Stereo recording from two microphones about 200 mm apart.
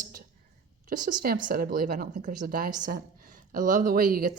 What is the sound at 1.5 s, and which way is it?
Speech, 45° right (ahead or behind).